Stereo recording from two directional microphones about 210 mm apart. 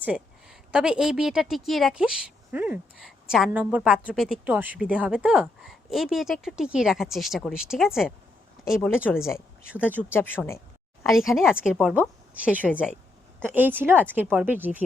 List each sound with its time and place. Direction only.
0.0 s a woman's voice: 5° right (ahead or behind)
9.0 s a woman's voice: 10° left (ahead or behind)
11.0 s a woman's voice: centre (ahead or behind)